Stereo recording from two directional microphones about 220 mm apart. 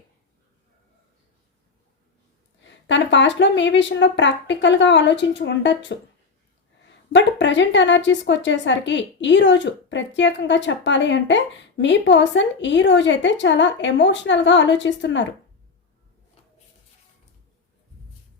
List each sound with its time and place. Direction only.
2.6 s speech: 55° left (ahead or behind)
7.1 s speech: 55° left (ahead or behind)